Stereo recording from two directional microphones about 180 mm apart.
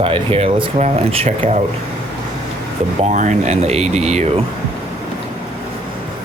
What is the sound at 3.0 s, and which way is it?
Speech, 40° right (ahead or behind).